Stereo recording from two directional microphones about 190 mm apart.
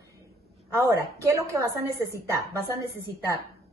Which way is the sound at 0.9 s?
15° right (ahead or behind).